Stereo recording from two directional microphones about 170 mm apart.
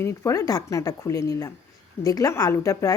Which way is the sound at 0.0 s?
20° left (ahead or behind).